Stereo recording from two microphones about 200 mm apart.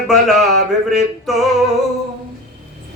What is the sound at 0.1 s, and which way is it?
Music, centre (ahead or behind).